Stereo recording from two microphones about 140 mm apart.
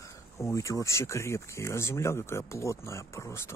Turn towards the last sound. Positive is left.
turn(degrees=20)  # may be behind; listen again after turning